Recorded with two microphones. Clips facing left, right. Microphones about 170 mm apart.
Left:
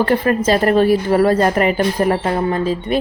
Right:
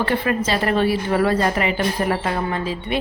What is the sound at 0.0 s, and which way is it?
Speech, 45° left (ahead or behind).